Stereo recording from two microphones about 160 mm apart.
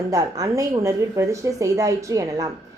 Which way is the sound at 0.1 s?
20° right (ahead or behind).